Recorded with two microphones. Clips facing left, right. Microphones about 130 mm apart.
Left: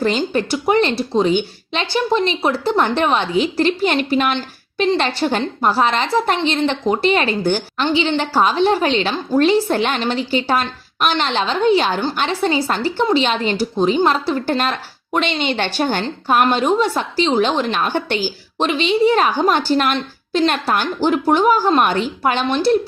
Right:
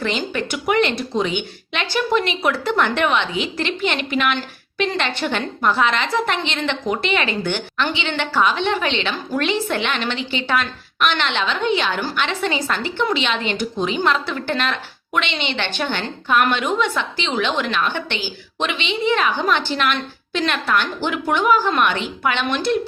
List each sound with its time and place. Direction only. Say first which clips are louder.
0.0 s speech: left 5 dB; 35° left (ahead or behind)